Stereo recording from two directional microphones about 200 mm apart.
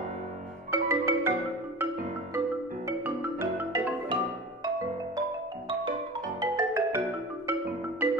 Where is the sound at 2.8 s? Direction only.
10° right (ahead or behind).